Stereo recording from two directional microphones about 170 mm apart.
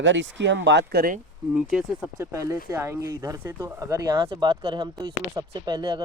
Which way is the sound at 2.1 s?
20° right (ahead or behind).